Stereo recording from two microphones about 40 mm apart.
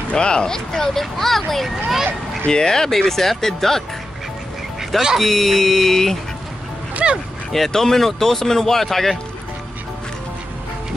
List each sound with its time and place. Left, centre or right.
0.1 s a child's voice: left; by 2.0 s centre
2.4 s a child's voice: centre
5.1 s a child's voice: centre
7.0 s a sound: right
7.5 s a child's voice: centre